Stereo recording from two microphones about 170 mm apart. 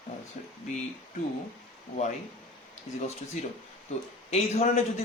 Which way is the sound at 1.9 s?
55° left (ahead or behind).